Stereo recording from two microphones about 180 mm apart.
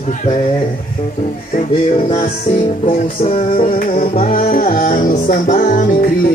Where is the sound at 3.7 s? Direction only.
45° left (ahead or behind).